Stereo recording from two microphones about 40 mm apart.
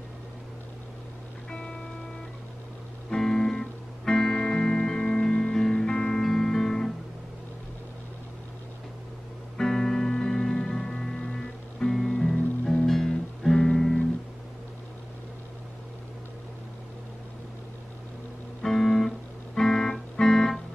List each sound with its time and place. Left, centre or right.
1.5 s music: left
3.1 s music: centre
6.2 s music: centre
9.6 s music: centre
18.6 s music: centre